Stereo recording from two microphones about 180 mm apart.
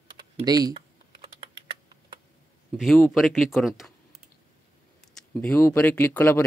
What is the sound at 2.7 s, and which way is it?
Speech, centre (ahead or behind).